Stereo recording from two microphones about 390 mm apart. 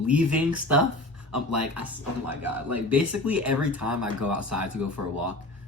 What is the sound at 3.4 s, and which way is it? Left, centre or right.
Speech, right.